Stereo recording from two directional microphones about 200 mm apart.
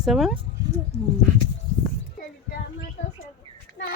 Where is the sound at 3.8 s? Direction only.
55° left (ahead or behind).